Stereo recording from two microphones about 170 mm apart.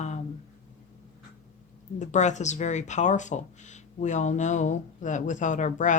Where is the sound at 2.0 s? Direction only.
45° left (ahead or behind).